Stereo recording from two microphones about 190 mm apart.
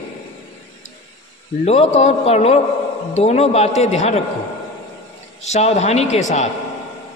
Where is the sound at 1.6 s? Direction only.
35° left (ahead or behind).